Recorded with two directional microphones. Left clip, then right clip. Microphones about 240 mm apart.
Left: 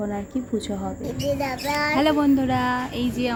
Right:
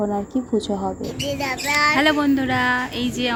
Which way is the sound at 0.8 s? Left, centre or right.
Centre.